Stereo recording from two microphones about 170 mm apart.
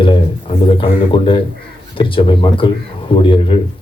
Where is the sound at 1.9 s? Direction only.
30° left (ahead or behind).